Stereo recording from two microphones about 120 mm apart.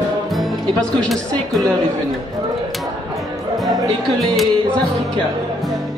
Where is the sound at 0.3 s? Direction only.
Centre (ahead or behind).